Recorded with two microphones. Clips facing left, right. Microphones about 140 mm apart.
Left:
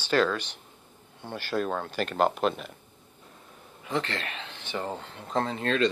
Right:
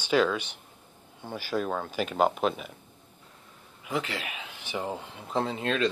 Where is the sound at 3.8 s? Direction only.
10° right (ahead or behind).